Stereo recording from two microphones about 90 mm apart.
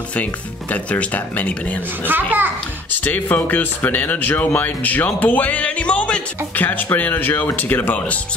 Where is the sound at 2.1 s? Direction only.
20° right (ahead or behind).